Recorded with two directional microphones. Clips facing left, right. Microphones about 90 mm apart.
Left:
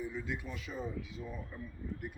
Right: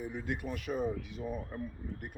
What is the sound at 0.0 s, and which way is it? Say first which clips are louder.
Speech: right 2 dB; 55° right (ahead or behind).